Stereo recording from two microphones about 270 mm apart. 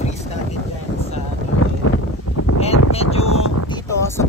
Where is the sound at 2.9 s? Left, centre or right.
Left.